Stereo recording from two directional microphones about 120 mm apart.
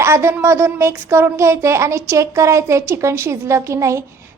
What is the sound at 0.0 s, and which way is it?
Speech, 20° right (ahead or behind).